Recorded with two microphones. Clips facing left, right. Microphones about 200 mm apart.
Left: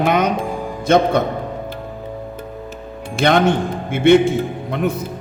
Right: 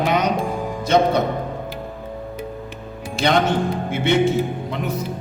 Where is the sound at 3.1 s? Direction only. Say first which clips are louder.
Left 3 dB; 55° left (ahead or behind).